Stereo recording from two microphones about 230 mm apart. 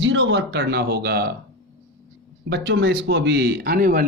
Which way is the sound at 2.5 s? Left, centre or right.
Right.